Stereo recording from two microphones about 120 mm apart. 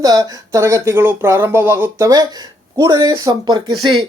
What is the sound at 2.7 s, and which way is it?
Speech, 35° right (ahead or behind).